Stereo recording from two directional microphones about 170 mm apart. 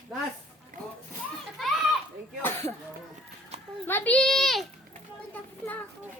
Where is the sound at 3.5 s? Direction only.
40° right (ahead or behind).